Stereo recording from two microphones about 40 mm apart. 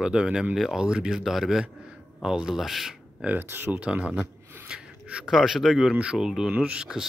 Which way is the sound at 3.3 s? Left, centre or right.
Right.